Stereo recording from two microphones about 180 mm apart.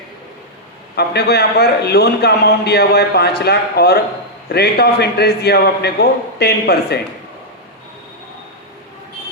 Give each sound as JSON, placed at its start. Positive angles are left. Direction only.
{"t": 0.9, "sound": "a man's voice", "side_deg": 65}